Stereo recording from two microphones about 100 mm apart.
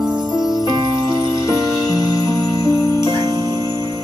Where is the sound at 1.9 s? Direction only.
40° left (ahead or behind).